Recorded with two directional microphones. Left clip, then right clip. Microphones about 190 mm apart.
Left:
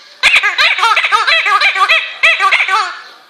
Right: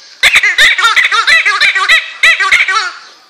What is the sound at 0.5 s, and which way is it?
Baby laughter, 15° right (ahead or behind).